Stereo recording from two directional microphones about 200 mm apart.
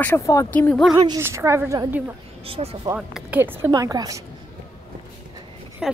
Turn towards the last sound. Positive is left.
turn(degrees=0)  # may be behind; listen again after turning